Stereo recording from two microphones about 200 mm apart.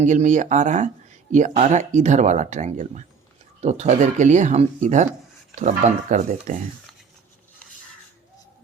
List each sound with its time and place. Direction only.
0.0 s speech: 35° right (ahead or behind)